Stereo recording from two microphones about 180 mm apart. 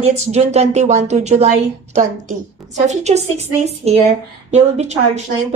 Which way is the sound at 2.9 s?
40° right (ahead or behind).